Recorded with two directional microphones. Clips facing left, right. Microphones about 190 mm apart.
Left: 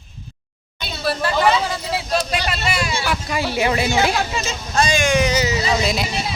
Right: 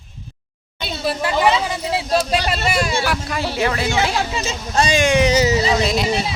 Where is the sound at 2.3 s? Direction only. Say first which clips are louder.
Right 3 dB; 40° right (ahead or behind).